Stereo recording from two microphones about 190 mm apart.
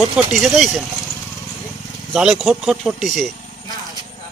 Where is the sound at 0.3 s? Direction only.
Centre (ahead or behind).